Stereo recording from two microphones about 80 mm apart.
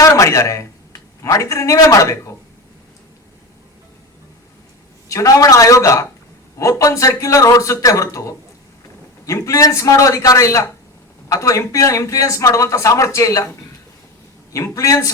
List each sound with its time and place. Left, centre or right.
0.0 s speech: left
5.0 s speech: left
14.5 s speech: left